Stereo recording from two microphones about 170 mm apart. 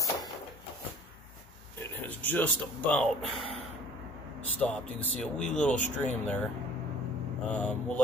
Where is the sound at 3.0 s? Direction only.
Centre (ahead or behind).